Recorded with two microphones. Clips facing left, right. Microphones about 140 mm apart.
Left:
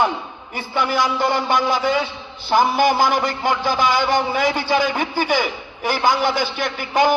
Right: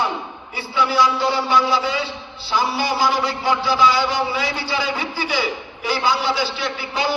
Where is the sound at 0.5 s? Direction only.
50° left (ahead or behind).